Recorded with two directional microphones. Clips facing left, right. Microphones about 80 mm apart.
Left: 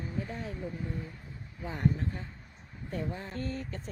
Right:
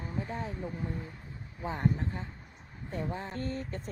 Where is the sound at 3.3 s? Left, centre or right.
Right.